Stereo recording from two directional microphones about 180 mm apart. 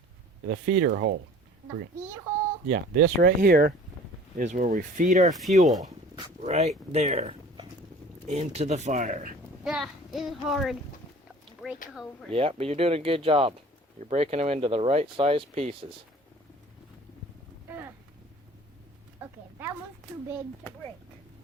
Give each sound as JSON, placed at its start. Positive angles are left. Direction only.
{"t": 0.4, "sound": "speech", "side_deg": -65}
{"t": 2.6, "sound": "speech", "side_deg": -60}
{"t": 4.4, "sound": "speech", "side_deg": -45}
{"t": 5.2, "sound": "speech", "side_deg": 0}
{"t": 6.4, "sound": "speech", "side_deg": -40}
{"t": 9.6, "sound": "speech", "side_deg": 0}
{"t": 11.9, "sound": "speech", "side_deg": 0}
{"t": 12.3, "sound": "speech", "side_deg": -30}
{"t": 17.7, "sound": "a sound", "side_deg": -10}
{"t": 19.2, "sound": "a sound", "side_deg": -15}